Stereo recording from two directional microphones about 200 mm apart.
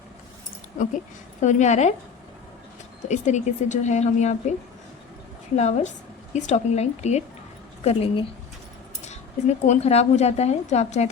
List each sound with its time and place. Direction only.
0.8 s a woman's voice: 40° left (ahead or behind)
3.1 s a woman's voice: 35° left (ahead or behind)
5.5 s a woman's voice: 35° left (ahead or behind)